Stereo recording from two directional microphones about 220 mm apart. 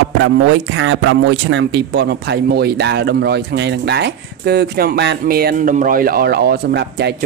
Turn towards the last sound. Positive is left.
turn(degrees=-50)  # may be behind; listen again after turning